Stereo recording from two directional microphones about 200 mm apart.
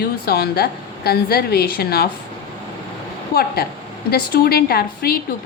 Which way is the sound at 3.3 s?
50° left (ahead or behind).